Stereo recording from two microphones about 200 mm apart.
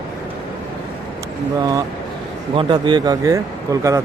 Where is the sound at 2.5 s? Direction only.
25° right (ahead or behind).